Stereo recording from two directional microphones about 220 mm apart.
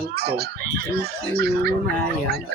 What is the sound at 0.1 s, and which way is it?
Speech, 45° right (ahead or behind).